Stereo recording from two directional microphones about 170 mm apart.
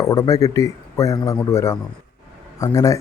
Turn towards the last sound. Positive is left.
turn(degrees=20)  # may be behind; listen again after turning